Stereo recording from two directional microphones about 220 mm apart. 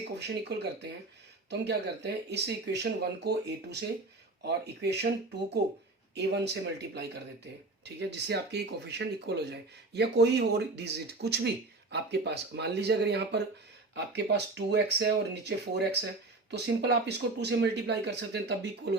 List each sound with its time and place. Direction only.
0.2 s speech: 50° right (ahead or behind)
6.1 s speech: 50° right (ahead or behind)